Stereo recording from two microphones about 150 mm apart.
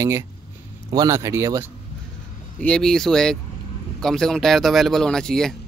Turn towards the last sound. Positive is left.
turn(degrees=5)  # may be behind; listen again after turning